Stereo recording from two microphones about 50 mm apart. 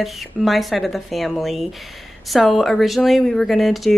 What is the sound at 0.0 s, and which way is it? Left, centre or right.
Speech, centre.